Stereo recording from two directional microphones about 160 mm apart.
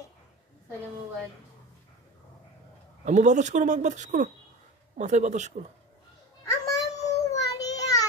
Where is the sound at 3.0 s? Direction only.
50° right (ahead or behind).